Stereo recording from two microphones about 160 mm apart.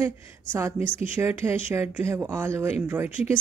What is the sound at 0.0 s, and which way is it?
Speech, 15° right (ahead or behind).